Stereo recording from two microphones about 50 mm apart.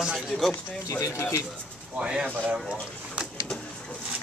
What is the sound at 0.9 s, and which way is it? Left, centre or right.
Speech, left.